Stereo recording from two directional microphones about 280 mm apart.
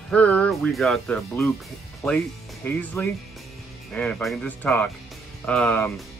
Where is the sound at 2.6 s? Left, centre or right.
Centre.